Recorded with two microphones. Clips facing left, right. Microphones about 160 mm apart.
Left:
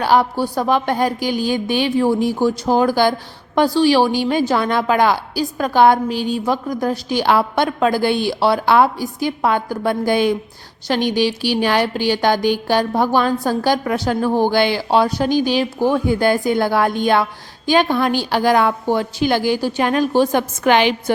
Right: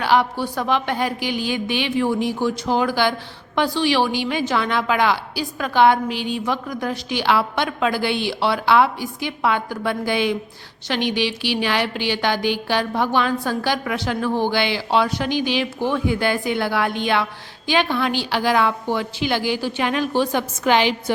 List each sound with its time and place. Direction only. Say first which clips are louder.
0.0 s a woman's voice: left 3 dB; 40° left (ahead or behind); by 20.9 s 55° left (ahead or behind)